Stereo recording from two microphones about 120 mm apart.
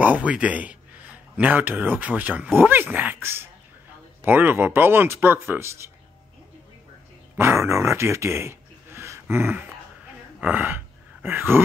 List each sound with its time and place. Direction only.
0.0 s speech: 10° right (ahead or behind)
7.3 s a man's voice: 20° right (ahead or behind)